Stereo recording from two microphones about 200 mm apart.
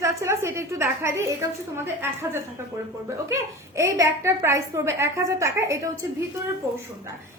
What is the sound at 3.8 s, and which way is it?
A woman's voice, 15° right (ahead or behind).